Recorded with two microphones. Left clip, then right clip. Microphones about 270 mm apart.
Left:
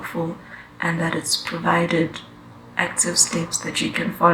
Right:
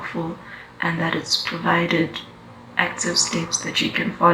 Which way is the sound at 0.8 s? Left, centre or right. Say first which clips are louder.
Right 1 dB; left.